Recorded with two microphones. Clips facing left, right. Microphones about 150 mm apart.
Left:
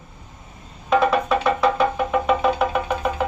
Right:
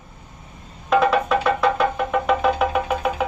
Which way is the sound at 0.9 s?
Centre (ahead or behind).